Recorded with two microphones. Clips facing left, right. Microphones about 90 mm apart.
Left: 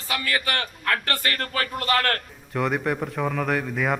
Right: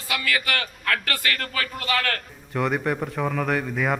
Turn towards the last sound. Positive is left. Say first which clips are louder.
# even
turn(degrees=0)  # may be behind; listen again after turning